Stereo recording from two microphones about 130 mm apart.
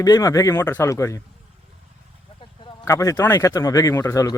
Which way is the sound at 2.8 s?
20° left (ahead or behind).